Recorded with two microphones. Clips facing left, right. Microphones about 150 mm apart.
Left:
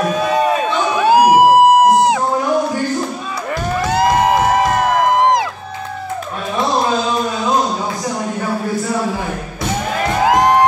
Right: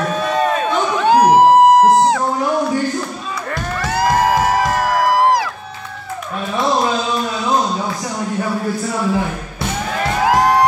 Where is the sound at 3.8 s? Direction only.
20° left (ahead or behind).